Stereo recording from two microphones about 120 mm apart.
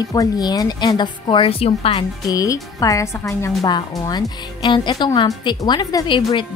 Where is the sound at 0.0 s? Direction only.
30° left (ahead or behind); by 2.0 s 55° left (ahead or behind).